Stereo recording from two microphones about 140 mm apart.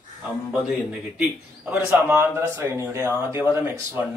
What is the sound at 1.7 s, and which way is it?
Speech, 15° right (ahead or behind).